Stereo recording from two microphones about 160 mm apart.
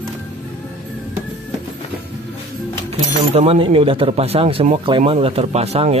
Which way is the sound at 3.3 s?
40° right (ahead or behind).